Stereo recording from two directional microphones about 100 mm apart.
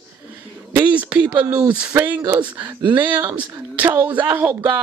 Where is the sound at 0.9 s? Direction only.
15° right (ahead or behind).